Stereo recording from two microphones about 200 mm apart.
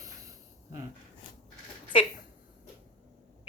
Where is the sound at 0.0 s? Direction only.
15° right (ahead or behind).